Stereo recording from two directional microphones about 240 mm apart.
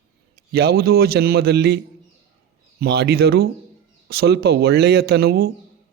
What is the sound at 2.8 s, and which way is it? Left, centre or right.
Speech, right.